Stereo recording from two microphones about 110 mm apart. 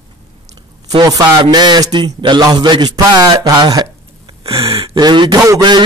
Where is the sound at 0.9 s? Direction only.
35° right (ahead or behind).